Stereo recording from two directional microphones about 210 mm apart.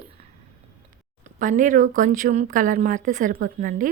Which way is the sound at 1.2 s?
35° right (ahead or behind).